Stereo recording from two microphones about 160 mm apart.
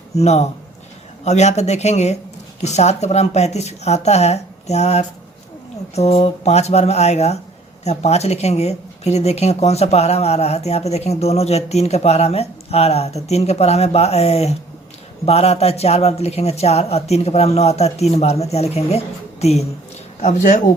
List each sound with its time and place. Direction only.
0.2 s speech: 45° left (ahead or behind)
20.2 s speech: 50° left (ahead or behind)